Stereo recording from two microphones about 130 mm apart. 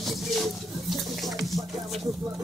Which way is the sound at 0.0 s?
Centre (ahead or behind).